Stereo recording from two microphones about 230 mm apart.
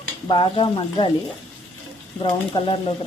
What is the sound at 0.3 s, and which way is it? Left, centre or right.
Stir, left.